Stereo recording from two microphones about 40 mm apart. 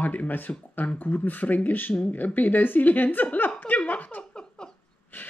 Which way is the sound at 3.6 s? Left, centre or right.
Left.